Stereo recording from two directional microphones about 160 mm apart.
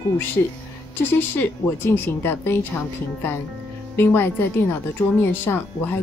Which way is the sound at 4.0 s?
15° left (ahead or behind).